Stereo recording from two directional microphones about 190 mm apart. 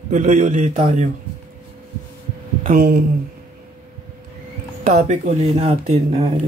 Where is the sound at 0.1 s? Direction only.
40° right (ahead or behind).